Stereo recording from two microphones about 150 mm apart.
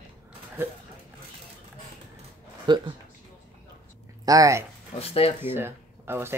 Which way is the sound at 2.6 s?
30° right (ahead or behind).